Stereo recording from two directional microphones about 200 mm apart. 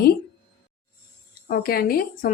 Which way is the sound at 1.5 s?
50° left (ahead or behind).